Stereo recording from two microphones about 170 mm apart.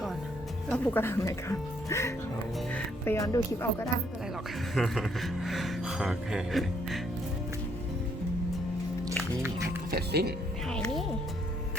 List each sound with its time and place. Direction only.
0.7 s speech: 10° left (ahead or behind)
4.7 s speech: centre (ahead or behind)
9.4 s music: 15° right (ahead or behind)
9.9 s speech: 70° right (ahead or behind)
10.7 s speech: 5° left (ahead or behind)